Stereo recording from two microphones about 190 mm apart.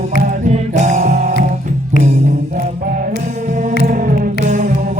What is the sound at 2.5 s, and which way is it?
Music, 40° right (ahead or behind).